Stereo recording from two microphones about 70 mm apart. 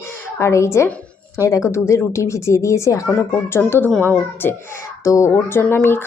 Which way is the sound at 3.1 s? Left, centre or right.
Left.